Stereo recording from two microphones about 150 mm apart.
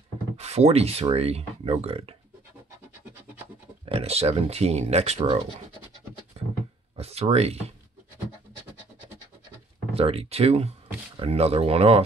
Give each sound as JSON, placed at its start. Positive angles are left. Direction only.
{"t": 0.4, "sound": "speech", "side_deg": -45}
{"t": 3.9, "sound": "speech", "side_deg": -45}
{"t": 7.0, "sound": "speech", "side_deg": -45}
{"t": 9.9, "sound": "speech", "side_deg": -40}